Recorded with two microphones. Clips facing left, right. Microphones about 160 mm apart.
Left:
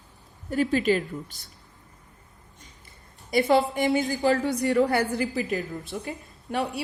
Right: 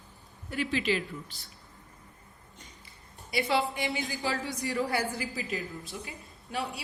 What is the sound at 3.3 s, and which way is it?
A woman's voice, 45° left (ahead or behind).